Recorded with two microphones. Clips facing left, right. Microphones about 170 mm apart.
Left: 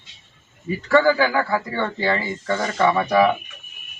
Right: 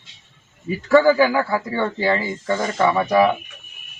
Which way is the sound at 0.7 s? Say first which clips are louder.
Right 3 dB; 10° right (ahead or behind).